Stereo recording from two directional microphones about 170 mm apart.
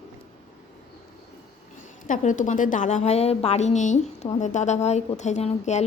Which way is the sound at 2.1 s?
50° left (ahead or behind).